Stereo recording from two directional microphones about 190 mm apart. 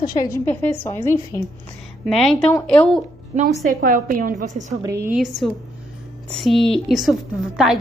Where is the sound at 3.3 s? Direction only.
35° right (ahead or behind).